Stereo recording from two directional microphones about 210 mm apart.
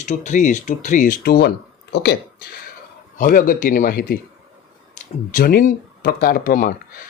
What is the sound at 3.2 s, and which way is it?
Speech, 40° left (ahead or behind).